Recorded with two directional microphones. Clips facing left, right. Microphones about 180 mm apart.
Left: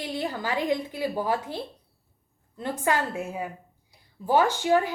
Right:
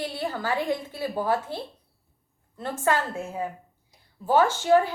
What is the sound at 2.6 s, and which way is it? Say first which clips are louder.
A woman's voice: right 1 dB; 15° left (ahead or behind).